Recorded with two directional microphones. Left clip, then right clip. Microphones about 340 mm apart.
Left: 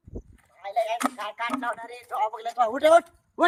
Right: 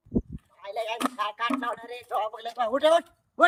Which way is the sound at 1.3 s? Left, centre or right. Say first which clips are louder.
Even; centre.